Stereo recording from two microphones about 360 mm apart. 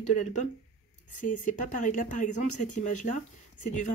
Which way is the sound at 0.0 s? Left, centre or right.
Centre.